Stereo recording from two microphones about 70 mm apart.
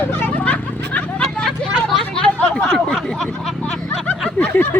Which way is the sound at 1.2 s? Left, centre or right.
Centre.